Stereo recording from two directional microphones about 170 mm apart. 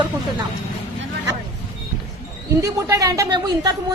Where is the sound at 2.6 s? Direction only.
20° right (ahead or behind).